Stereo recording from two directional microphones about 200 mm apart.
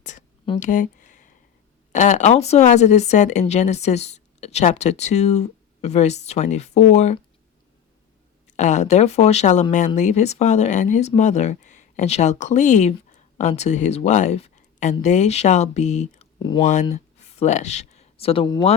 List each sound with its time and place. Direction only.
0.6 s a sound: 40° left (ahead or behind)
1.9 s speech: 35° left (ahead or behind)
8.5 s speech: 35° left (ahead or behind)
16.4 s speech: 20° left (ahead or behind)
17.4 s speech: 35° left (ahead or behind)